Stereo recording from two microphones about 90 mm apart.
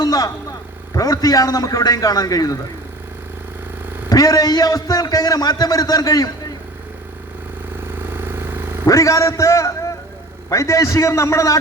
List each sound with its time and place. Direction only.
0.0 s vehicle: 45° left (ahead or behind)
0.9 s a man's voice: 40° left (ahead or behind)
4.1 s a man's voice: 40° left (ahead or behind)
7.9 s vehicle: 25° right (ahead or behind)
8.9 s a man's voice: 35° left (ahead or behind)